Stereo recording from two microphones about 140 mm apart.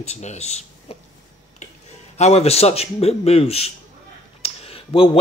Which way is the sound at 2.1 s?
50° left (ahead or behind).